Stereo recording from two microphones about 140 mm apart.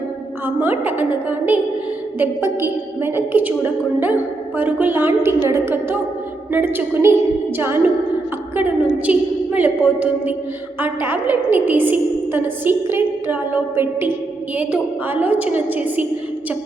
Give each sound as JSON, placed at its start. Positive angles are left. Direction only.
{"t": 0.4, "sound": "a woman's voice", "side_deg": -15}